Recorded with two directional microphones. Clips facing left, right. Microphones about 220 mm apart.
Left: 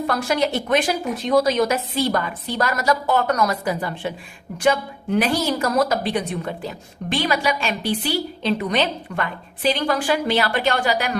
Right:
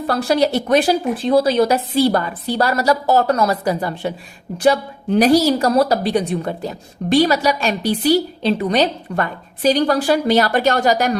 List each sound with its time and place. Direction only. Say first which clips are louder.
0.1 s a woman's voice: right 7 dB; 35° right (ahead or behind)